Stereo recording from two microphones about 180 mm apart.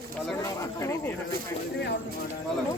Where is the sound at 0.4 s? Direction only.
15° left (ahead or behind).